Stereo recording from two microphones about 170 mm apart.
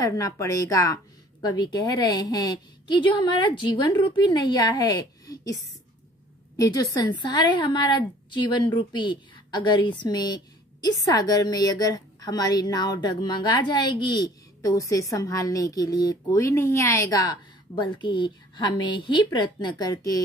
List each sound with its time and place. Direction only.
0.0 s a woman's voice: 20° left (ahead or behind)